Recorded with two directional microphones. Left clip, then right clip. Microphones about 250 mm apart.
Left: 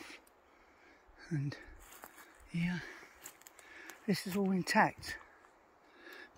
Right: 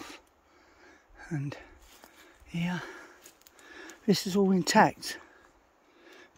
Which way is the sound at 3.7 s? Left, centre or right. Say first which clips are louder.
Right 10 dB; right.